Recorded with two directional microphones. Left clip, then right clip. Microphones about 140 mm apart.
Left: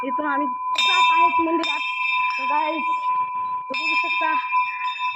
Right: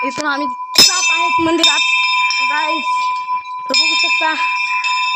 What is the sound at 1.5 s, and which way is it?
Speech, 90° right.